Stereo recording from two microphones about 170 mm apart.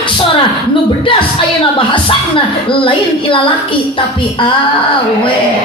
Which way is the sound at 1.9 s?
30° left (ahead or behind).